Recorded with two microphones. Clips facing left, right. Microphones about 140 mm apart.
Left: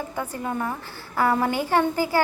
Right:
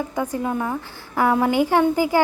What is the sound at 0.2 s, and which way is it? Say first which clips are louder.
A woman's voice: right 4 dB; 10° right (ahead or behind).